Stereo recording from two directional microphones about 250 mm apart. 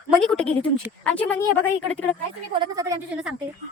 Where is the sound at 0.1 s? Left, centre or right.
Centre.